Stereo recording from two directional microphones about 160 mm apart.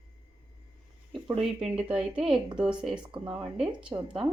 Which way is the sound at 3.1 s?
30° right (ahead or behind).